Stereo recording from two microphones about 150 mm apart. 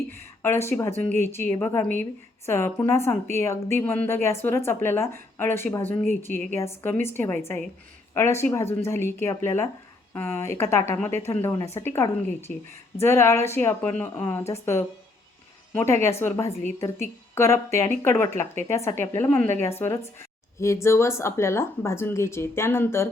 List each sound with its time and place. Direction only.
0.1 s speech: 15° left (ahead or behind)